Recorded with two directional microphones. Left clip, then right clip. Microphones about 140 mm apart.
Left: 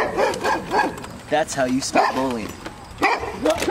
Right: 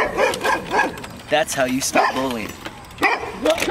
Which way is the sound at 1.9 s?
Centre (ahead or behind).